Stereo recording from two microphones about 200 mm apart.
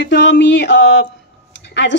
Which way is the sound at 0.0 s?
60° left (ahead or behind).